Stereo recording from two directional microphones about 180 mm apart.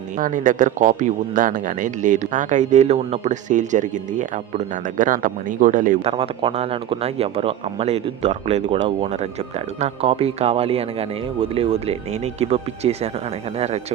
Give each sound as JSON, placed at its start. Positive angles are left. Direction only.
{"t": 0.2, "sound": "speech", "side_deg": -45}
{"t": 6.0, "sound": "speech", "side_deg": -30}